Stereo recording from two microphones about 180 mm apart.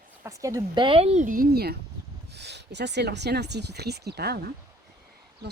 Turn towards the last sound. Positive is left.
turn(degrees=-60)  # may be behind; listen again after turning